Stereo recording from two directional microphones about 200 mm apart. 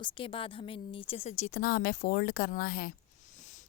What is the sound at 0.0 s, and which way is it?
Speech, 25° left (ahead or behind).